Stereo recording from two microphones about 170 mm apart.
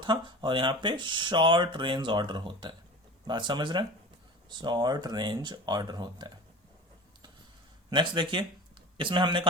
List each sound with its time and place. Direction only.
0.0 s speech: 30° right (ahead or behind)
7.9 s speech: 25° right (ahead or behind)